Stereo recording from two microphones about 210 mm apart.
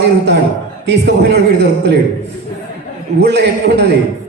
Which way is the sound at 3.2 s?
50° right (ahead or behind).